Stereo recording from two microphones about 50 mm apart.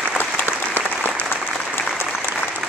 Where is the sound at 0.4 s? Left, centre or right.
Left.